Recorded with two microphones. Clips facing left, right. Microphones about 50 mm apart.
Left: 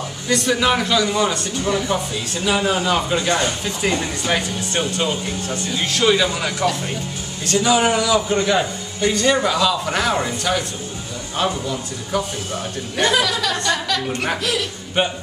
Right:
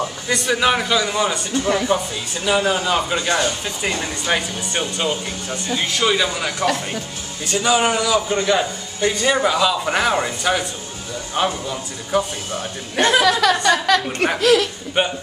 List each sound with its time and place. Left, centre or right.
0.3 s speech: centre
13.2 s a woman's voice: right
14.0 s speech: centre